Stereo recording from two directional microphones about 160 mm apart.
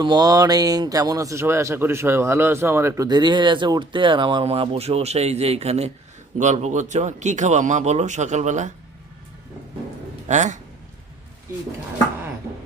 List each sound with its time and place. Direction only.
0.0 s a man's voice: 25° right (ahead or behind); by 8.7 s 50° right (ahead or behind)
10.2 s a man's voice: 50° right (ahead or behind)